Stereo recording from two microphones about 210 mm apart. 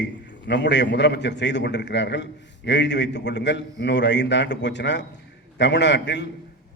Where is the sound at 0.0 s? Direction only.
55° left (ahead or behind).